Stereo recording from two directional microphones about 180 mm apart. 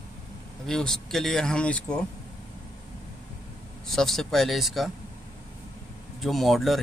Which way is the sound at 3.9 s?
Centre (ahead or behind).